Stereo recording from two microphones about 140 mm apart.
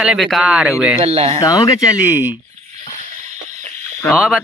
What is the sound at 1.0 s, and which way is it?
Speech, 50° right (ahead or behind).